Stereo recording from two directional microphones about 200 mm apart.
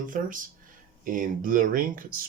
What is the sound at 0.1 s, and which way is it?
Speech, 40° right (ahead or behind).